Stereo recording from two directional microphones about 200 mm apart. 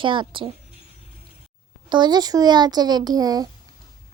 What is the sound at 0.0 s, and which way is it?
Speech, 25° right (ahead or behind).